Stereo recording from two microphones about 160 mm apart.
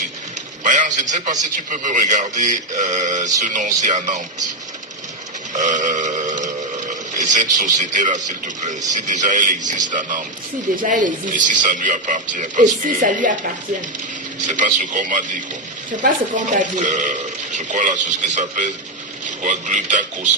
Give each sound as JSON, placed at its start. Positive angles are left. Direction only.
{"t": 0.6, "sound": "a man's voice", "side_deg": -50}
{"t": 5.5, "sound": "burping", "side_deg": -50}
{"t": 7.2, "sound": "a man's voice", "side_deg": -50}
{"t": 14.4, "sound": "a man's voice", "side_deg": -50}